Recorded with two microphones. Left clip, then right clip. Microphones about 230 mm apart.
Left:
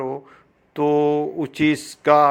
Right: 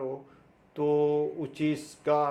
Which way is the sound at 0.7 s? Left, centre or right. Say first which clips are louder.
Left 7 dB; left.